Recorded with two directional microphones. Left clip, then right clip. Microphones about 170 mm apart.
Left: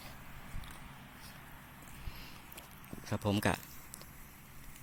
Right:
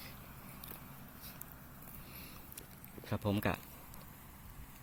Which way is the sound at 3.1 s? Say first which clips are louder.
Left 3 dB; 20° left (ahead or behind).